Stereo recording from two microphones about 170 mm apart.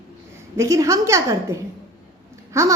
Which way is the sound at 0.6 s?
20° right (ahead or behind).